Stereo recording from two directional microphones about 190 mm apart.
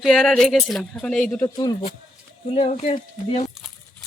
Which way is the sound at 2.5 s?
35° left (ahead or behind).